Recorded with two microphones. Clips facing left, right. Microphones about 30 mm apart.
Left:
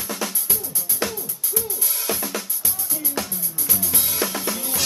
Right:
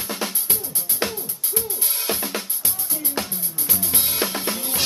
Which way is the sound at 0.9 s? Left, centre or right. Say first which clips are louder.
Right 1 dB; right.